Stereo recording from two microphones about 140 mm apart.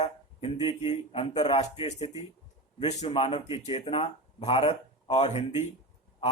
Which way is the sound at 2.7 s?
55° left (ahead or behind).